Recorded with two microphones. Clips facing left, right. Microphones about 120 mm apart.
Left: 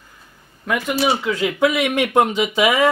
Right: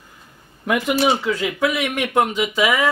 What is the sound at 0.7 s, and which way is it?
Speech, 10° right (ahead or behind).